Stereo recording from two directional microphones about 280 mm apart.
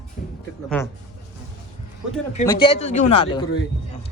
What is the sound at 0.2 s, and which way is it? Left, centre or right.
Music, left.